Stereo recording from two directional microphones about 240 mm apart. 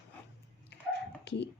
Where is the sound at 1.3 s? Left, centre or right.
Left.